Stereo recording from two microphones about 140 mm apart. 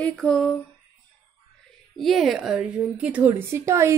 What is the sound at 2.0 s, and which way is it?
A woman's voice, centre (ahead or behind).